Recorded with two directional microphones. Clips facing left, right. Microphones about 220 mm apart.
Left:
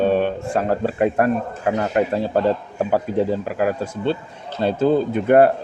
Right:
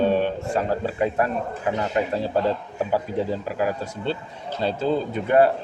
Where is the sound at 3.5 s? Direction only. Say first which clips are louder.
Left 4 dB; 50° left (ahead or behind).